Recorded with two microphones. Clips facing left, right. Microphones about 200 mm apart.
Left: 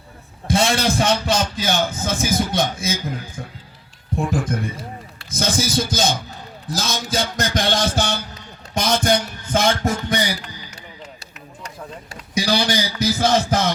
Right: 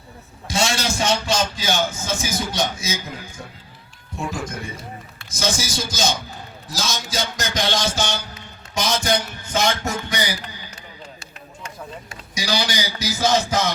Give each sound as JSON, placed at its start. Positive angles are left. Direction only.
{"t": 0.4, "sound": "a man's voice", "side_deg": 55}
{"t": 4.1, "sound": "a man's voice", "side_deg": 55}
{"t": 11.2, "sound": "run", "side_deg": 35}
{"t": 12.3, "sound": "a man's voice", "side_deg": 55}